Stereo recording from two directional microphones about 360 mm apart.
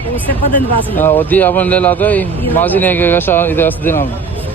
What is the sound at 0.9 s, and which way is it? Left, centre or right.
Speech, centre.